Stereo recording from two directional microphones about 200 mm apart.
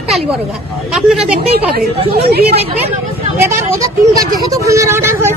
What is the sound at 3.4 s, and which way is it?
Speech, 15° right (ahead or behind).